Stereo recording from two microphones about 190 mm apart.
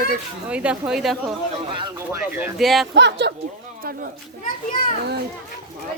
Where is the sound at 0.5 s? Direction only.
5° right (ahead or behind).